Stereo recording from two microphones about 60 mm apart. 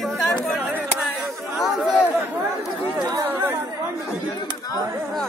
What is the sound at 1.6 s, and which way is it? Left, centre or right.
Speech, centre.